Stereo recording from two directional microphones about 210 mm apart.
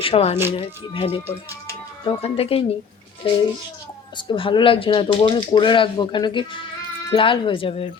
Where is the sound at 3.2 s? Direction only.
25° left (ahead or behind).